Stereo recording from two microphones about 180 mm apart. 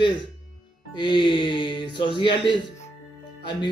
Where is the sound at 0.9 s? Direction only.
25° left (ahead or behind).